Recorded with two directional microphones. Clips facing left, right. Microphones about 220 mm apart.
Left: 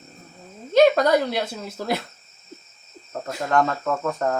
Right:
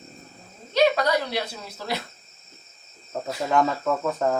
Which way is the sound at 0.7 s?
50° left (ahead or behind).